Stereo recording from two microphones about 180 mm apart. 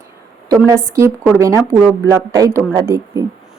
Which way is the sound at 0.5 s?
15° right (ahead or behind).